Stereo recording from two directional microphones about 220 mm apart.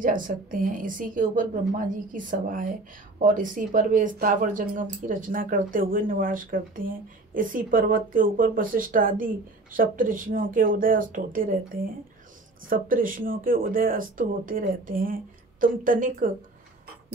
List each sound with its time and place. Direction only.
0.0 s speech: 40° right (ahead or behind)